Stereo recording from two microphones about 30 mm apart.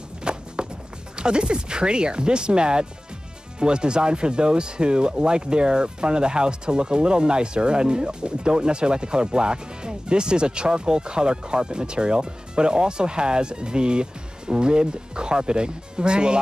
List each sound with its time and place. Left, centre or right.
0.2 s walk: right
1.1 s speech: right